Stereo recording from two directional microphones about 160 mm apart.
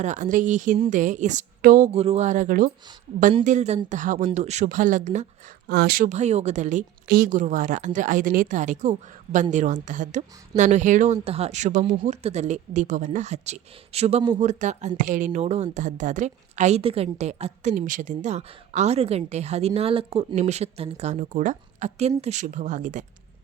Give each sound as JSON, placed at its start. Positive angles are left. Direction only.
{"t": 0.0, "sound": "a woman's voice", "side_deg": -50}
{"t": 5.6, "sound": "speech", "side_deg": -90}
{"t": 6.1, "sound": "a woman's voice", "side_deg": -45}
{"t": 14.3, "sound": "a woman's voice", "side_deg": -45}